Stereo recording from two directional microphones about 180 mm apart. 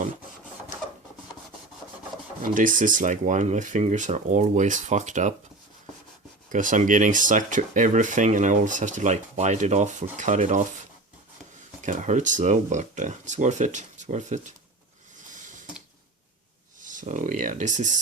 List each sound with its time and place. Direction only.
2.4 s speech: 50° right (ahead or behind)
6.5 s speech: 45° right (ahead or behind)
11.8 s speech: 45° right (ahead or behind)
15.3 s a sound: 45° right (ahead or behind)
16.8 s speech: 45° right (ahead or behind)